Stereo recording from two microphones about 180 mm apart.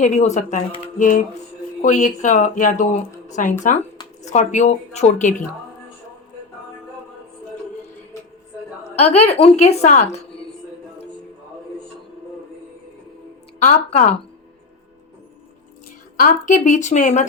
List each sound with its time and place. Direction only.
0.0 s speech: 40° left (ahead or behind)
9.0 s speech: 35° left (ahead or behind)
13.6 s speech: 40° left (ahead or behind)
16.1 s speech: 45° left (ahead or behind)